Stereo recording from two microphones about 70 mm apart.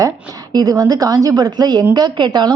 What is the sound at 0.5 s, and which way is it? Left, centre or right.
A woman's voice, right.